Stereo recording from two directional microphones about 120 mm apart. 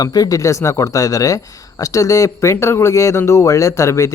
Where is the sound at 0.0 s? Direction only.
30° left (ahead or behind).